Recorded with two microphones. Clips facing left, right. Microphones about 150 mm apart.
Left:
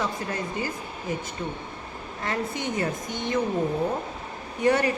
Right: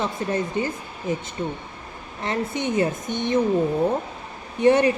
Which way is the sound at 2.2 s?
20° right (ahead or behind).